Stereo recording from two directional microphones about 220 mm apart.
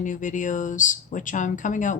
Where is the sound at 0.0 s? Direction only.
35° left (ahead or behind).